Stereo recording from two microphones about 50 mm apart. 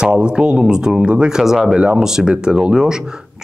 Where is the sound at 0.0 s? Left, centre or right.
Centre.